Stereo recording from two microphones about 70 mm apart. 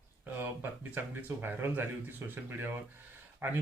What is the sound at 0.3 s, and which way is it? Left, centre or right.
Speech, right.